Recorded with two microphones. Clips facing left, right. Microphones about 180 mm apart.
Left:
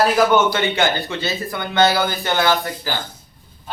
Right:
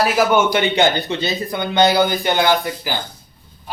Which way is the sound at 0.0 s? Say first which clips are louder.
Even; 10° right (ahead or behind).